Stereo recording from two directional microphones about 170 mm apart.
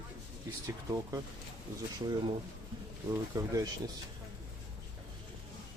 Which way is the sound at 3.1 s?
20° right (ahead or behind).